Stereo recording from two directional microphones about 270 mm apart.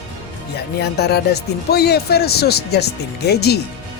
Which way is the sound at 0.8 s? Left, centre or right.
Left.